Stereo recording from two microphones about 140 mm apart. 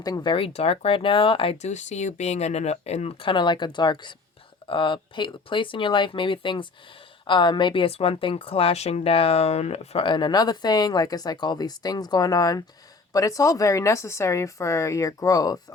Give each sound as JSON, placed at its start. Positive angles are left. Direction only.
{"t": 0.0, "sound": "a woman's voice", "side_deg": 30}
{"t": 1.6, "sound": "a woman's voice", "side_deg": 55}